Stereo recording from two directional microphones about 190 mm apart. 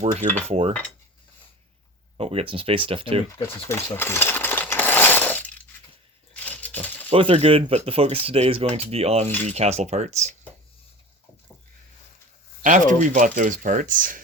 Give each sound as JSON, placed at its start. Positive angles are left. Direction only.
{"t": 0.0, "sound": "speech", "side_deg": -35}
{"t": 2.1, "sound": "speech", "side_deg": -30}
{"t": 3.3, "sound": "coin", "side_deg": 15}
{"t": 6.4, "sound": "a sound", "side_deg": 10}
{"t": 7.1, "sound": "speech", "side_deg": -30}
{"t": 12.6, "sound": "speech", "side_deg": -40}